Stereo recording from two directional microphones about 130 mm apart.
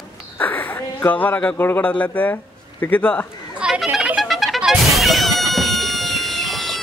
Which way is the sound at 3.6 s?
5° right (ahead or behind).